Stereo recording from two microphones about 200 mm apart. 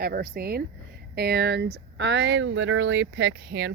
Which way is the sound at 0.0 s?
50° right (ahead or behind).